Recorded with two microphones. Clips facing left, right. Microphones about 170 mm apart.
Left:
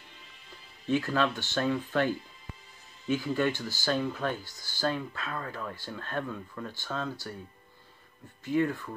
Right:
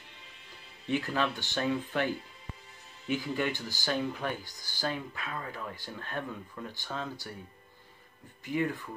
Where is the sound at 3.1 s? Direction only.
15° right (ahead or behind).